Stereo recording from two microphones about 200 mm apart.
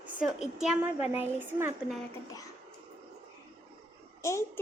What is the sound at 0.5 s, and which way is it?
A woman's voice, 5° right (ahead or behind).